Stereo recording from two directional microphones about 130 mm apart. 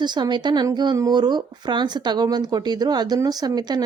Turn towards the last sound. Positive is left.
turn(degrees=-30)  # may be behind; listen again after turning